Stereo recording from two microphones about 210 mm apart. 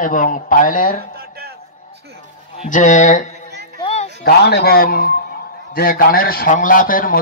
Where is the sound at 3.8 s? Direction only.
30° left (ahead or behind).